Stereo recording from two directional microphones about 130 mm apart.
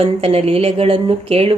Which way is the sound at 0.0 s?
50° right (ahead or behind).